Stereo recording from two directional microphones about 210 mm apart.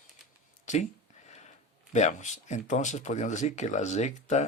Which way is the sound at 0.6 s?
35° left (ahead or behind).